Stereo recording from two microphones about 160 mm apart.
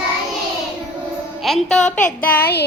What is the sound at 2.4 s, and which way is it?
Child singing, 80° left.